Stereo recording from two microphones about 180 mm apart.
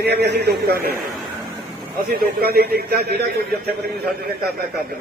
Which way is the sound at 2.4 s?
60° right (ahead or behind).